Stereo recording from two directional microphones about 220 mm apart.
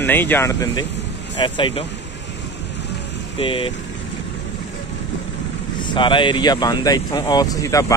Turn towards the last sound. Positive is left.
turn(degrees=15)  # may be behind; listen again after turning